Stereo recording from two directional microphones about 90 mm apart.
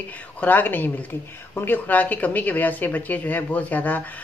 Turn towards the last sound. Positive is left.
turn(degrees=20)  # may be behind; listen again after turning